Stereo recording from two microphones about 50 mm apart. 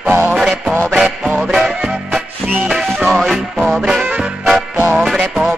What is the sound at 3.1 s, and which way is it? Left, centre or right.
Music, centre.